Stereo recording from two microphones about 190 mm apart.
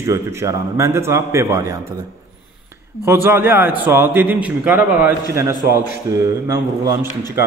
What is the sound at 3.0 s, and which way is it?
A man's voice, 15° right (ahead or behind).